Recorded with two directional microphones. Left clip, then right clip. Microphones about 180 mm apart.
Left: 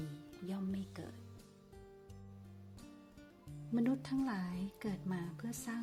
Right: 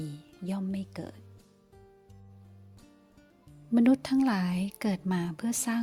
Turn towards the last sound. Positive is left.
turn(degrees=-50)  # may be behind; listen again after turning